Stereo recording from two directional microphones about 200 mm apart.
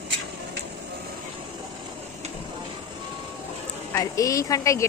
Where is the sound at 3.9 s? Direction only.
15° left (ahead or behind).